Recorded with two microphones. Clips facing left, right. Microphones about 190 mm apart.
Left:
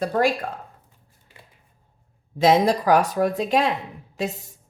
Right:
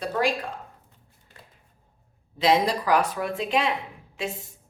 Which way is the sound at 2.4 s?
45° left (ahead or behind).